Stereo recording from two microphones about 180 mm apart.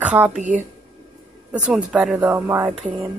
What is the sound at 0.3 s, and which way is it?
Speech, 45° right (ahead or behind).